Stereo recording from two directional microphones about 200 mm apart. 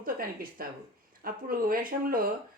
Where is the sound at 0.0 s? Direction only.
45° right (ahead or behind).